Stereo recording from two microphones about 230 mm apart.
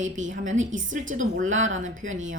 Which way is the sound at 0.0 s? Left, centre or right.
Right.